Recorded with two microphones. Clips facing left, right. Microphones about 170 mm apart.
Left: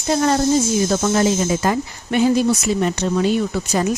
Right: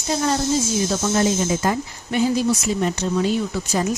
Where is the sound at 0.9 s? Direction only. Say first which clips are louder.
Left 2 dB; 70° left (ahead or behind).